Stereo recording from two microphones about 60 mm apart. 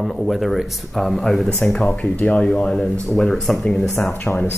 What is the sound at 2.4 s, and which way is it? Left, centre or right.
Speech, centre.